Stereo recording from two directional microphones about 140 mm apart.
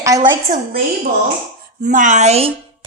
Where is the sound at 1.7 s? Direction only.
65° right (ahead or behind); by 2.9 s 45° right (ahead or behind).